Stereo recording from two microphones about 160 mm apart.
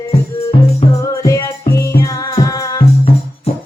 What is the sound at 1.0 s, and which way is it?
Music, 20° left (ahead or behind).